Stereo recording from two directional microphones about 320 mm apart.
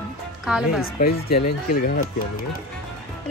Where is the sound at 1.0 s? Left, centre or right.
Left.